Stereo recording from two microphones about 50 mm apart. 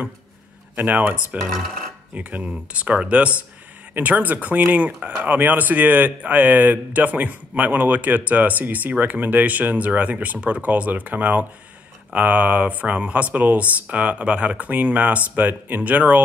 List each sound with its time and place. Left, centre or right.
0.7 s speech: right
1.4 s speech: centre
2.1 s speech: right